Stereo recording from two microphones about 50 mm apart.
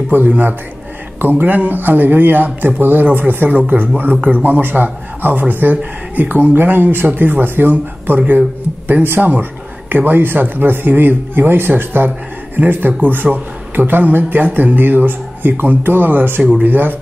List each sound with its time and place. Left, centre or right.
0.1 s a man's voice: right
9.0 s a man's voice: right